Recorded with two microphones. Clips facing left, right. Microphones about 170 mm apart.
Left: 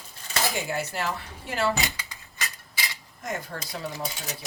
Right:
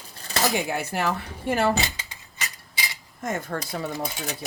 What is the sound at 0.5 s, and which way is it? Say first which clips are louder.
Speech: right 3 dB; 60° right (ahead or behind).